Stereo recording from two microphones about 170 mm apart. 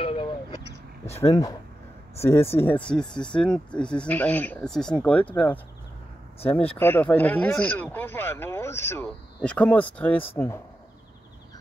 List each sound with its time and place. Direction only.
0.0 s vehicle: 30° left (ahead or behind)
1.1 s speech: 20° left (ahead or behind)